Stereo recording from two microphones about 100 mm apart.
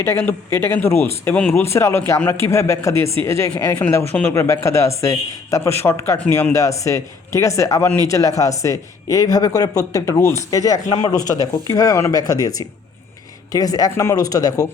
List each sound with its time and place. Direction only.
0.0 s a man's voice: 25° left (ahead or behind)
4.6 s a man's voice: 30° left (ahead or behind)